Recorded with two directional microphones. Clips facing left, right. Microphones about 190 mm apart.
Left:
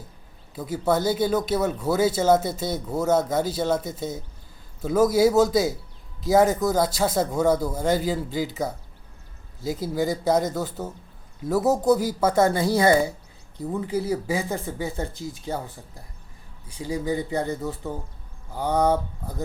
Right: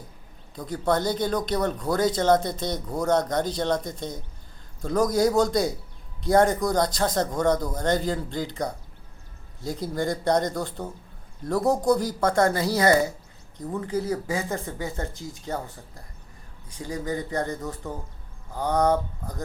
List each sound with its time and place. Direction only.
0.5 s speech: 5° left (ahead or behind)
12.5 s speech: 25° left (ahead or behind)
13.6 s speech: 10° left (ahead or behind)
16.7 s speech: 10° left (ahead or behind)